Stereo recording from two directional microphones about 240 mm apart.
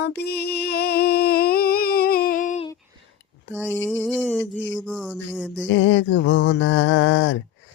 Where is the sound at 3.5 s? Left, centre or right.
Centre.